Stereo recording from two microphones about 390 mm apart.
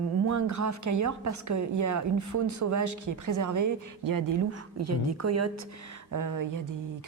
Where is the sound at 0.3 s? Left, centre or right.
Right.